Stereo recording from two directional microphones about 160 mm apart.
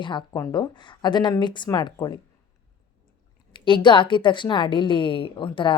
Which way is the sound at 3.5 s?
30° left (ahead or behind).